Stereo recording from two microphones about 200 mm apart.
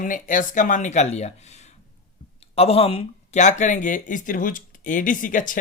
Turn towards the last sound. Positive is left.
turn(degrees=40)  # may be behind; listen again after turning